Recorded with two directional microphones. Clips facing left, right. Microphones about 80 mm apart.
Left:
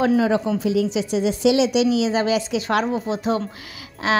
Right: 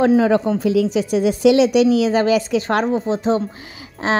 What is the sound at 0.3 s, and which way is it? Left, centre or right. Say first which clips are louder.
A child's voice: right 4 dB; right.